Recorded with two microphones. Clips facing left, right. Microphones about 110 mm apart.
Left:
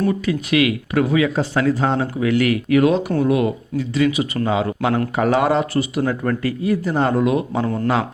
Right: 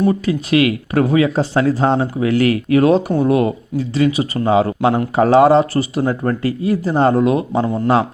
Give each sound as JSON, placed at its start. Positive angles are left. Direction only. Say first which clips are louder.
{"t": 0.1, "sound": "speech", "louder": "right 3 dB", "side_deg": -35}